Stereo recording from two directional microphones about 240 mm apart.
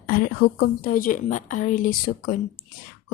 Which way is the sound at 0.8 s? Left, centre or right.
Left.